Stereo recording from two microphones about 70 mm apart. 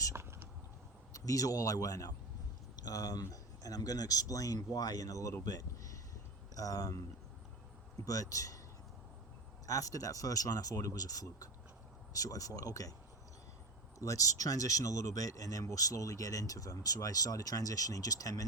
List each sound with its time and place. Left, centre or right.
0.1 s a sound: right
1.1 s speech: left
5.5 s a sound: left
6.6 s speech: left
9.6 s speech: left
14.0 s speech: left